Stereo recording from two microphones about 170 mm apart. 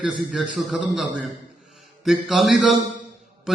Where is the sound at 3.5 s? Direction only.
Centre (ahead or behind).